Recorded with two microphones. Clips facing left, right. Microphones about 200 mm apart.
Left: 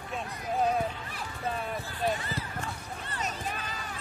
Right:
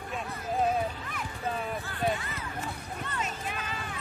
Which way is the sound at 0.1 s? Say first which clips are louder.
Even; centre (ahead or behind).